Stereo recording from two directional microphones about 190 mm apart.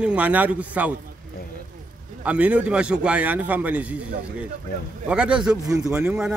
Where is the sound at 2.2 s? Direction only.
5° right (ahead or behind).